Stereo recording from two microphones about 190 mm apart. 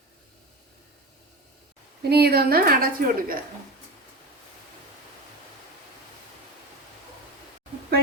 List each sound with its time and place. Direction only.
2.0 s a woman's voice: 55° right (ahead or behind)